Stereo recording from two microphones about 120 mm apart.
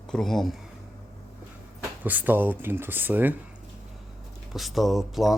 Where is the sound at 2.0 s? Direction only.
15° right (ahead or behind).